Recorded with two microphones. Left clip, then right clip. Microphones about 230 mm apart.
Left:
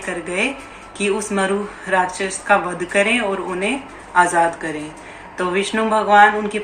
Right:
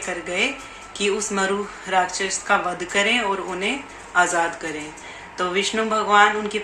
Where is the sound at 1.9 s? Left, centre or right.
Centre.